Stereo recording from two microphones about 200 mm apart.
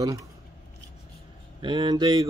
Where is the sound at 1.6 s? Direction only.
20° right (ahead or behind).